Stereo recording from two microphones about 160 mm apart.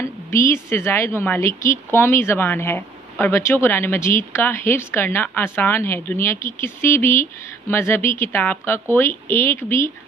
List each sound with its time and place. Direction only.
0.0 s a woman's voice: 15° left (ahead or behind)